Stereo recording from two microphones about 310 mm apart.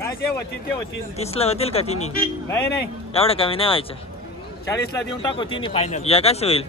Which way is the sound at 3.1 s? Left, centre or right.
Centre.